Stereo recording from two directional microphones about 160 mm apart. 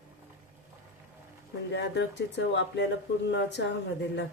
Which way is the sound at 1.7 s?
90° left.